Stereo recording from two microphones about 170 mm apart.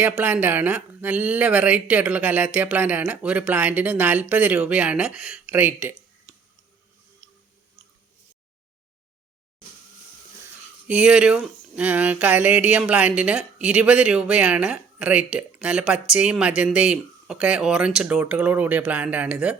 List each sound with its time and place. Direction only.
0.0 s speech: 10° right (ahead or behind)
7.2 s a sound: 20° right (ahead or behind)
10.8 s speech: 5° right (ahead or behind)